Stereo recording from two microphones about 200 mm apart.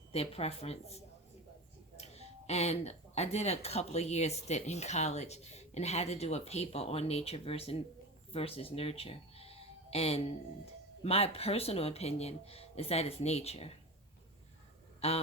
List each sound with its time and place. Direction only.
0.1 s speech: 30° left (ahead or behind)
15.0 s speech: 30° left (ahead or behind)